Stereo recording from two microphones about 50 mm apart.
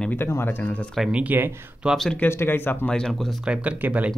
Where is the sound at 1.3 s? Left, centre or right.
Right.